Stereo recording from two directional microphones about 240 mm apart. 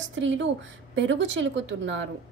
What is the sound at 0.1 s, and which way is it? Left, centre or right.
A woman's voice, right.